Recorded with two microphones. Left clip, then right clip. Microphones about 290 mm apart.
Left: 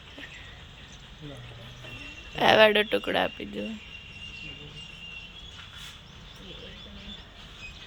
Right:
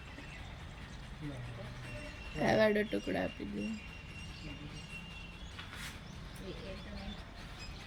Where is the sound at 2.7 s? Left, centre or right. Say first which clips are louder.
Left 9 dB; left.